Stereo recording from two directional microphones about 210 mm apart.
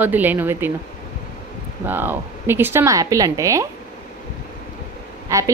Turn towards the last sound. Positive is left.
turn(degrees=-15)  # may be behind; listen again after turning